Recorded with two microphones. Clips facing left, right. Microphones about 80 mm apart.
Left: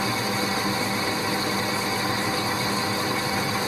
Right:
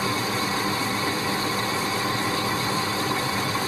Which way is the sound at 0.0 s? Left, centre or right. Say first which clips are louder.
Even; centre.